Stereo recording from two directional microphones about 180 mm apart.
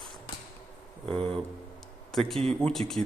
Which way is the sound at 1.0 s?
5° left (ahead or behind).